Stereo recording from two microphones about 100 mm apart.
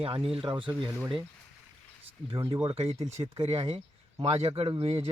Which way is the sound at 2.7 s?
80° right.